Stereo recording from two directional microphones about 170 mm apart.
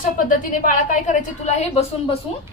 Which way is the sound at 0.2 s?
50° left (ahead or behind).